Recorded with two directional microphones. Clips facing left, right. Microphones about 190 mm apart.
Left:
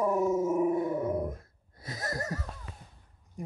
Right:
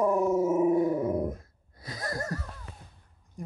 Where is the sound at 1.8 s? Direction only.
25° left (ahead or behind).